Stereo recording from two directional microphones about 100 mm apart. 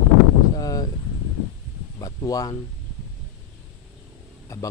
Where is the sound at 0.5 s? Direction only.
40° left (ahead or behind).